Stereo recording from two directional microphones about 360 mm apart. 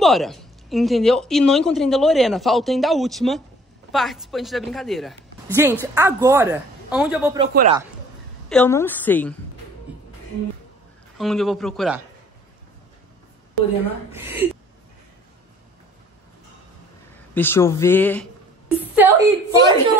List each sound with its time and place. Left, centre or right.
0.0 s a woman's voice: centre
7.3 s speech: centre
8.5 s a woman's voice: centre
11.1 s a woman's voice: centre
14.1 s a woman's voice: centre
17.3 s a woman's voice: centre
18.9 s speech: centre